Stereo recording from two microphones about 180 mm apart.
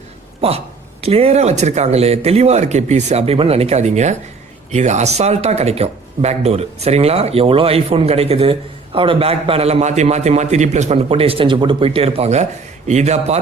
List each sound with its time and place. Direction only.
1.0 s speech: 35° right (ahead or behind)